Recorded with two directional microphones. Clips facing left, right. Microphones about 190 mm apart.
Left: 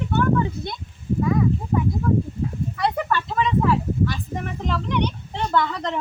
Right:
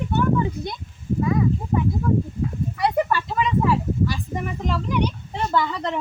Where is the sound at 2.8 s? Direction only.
10° right (ahead or behind).